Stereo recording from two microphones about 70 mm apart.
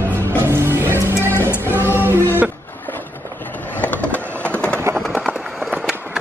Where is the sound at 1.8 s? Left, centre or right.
Right.